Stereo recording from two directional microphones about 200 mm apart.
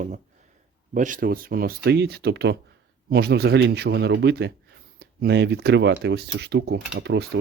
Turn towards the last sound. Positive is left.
turn(degrees=-60)  # may be behind; listen again after turning